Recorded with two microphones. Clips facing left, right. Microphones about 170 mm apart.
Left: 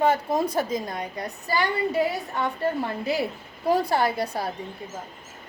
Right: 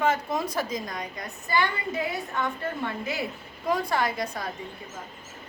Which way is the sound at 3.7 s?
30° left (ahead or behind).